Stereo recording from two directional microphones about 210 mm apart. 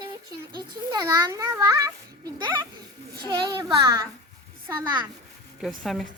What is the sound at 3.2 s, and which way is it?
A child's voice, 20° right (ahead or behind).